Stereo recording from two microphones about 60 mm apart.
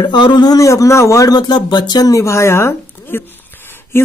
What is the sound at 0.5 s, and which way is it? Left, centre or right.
Speech, left.